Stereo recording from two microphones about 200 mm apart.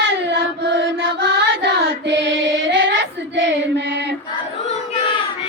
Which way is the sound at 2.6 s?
65° right (ahead or behind).